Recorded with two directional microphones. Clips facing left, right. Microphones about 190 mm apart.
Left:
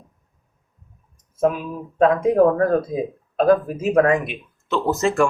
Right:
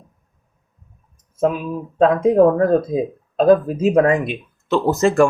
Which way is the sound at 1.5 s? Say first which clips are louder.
Right 1 dB; 20° right (ahead or behind).